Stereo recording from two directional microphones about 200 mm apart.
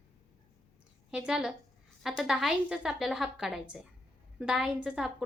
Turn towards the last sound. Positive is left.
turn(degrees=-5)  # may be behind; listen again after turning